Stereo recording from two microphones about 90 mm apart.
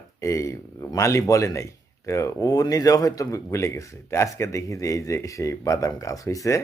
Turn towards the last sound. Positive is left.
turn(degrees=35)  # may be behind; listen again after turning